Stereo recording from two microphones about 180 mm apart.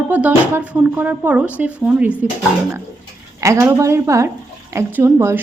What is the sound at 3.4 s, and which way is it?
A woman's voice, 15° right (ahead or behind).